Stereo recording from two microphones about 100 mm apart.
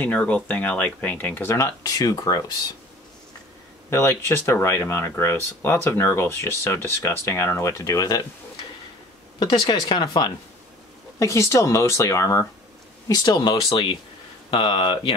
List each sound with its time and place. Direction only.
0.0 s speech: 15° left (ahead or behind); by 2.5 s 40° left (ahead or behind)
3.9 s speech: 25° left (ahead or behind)
9.4 s speech: 45° left (ahead or behind)
11.1 s speech: 30° left (ahead or behind)
13.1 s speech: 40° left (ahead or behind)
13.7 s speech: 55° left (ahead or behind)